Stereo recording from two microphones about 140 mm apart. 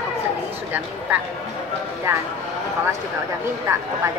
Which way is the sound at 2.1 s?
15° right (ahead or behind).